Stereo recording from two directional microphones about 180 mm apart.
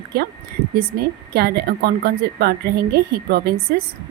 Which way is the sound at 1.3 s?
60° right (ahead or behind).